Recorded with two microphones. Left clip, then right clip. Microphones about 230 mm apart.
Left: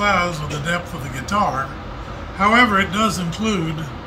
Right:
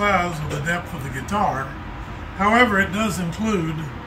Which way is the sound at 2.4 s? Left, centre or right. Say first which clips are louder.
Left 2 dB; centre.